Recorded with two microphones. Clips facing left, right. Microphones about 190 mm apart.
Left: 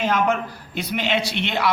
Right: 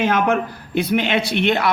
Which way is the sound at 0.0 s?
60° right (ahead or behind).